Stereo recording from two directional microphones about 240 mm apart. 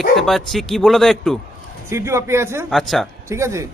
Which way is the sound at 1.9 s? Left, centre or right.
Centre.